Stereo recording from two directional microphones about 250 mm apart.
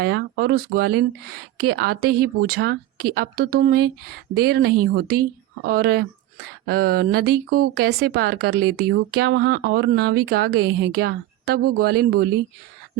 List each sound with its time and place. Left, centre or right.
0.0 s speech: right